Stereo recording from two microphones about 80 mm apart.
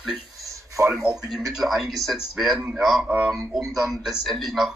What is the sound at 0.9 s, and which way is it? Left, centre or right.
Speech, centre.